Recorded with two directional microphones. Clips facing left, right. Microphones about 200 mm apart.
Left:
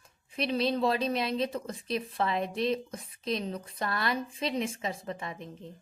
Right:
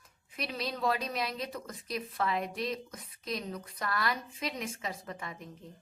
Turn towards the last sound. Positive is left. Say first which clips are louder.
# left 4 dB
turn(degrees=25)  # may be behind; listen again after turning